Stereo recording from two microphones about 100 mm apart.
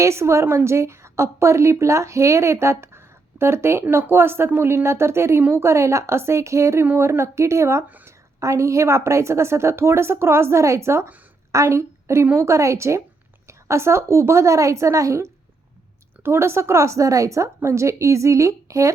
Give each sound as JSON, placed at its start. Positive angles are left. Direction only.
{"t": 0.0, "sound": "a woman's voice", "side_deg": -30}
{"t": 7.9, "sound": "a sound", "side_deg": -15}
{"t": 8.4, "sound": "a woman's voice", "side_deg": -30}